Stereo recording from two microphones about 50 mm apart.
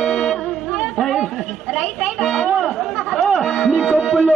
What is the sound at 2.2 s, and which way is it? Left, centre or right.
Speech, centre.